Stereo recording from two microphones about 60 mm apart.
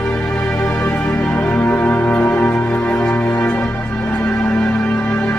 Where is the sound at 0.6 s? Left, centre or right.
Left.